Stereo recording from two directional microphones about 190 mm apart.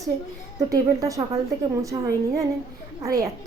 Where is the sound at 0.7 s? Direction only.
15° right (ahead or behind).